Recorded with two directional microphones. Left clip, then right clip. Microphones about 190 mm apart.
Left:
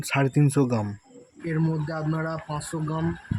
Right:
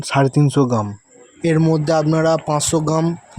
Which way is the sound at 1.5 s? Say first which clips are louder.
Right 13 dB; 40° right (ahead or behind).